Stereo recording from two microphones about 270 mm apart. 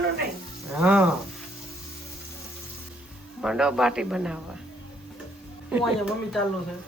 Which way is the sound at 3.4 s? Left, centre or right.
Centre.